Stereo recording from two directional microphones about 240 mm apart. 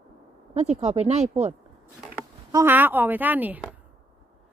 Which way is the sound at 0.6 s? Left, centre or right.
Right.